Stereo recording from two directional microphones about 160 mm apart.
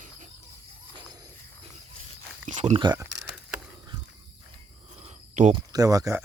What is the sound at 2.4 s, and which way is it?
Speech, 45° right (ahead or behind).